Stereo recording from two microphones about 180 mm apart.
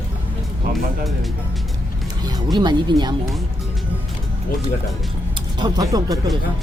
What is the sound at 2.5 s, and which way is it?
Speech, 25° right (ahead or behind).